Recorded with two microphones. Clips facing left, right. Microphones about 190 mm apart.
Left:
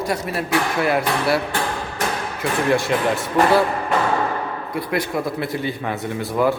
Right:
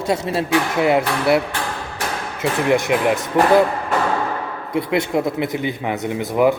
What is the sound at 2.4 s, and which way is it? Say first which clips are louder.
A man's voice: right 2 dB; 20° right (ahead or behind).